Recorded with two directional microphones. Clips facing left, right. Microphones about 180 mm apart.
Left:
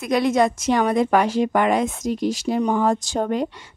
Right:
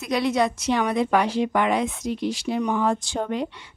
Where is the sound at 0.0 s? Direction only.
50° left (ahead or behind).